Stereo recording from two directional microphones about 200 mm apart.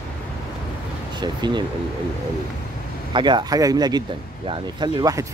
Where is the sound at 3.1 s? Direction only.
20° right (ahead or behind).